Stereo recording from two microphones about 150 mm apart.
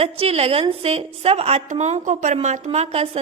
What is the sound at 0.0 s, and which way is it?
A woman's voice, 40° right (ahead or behind).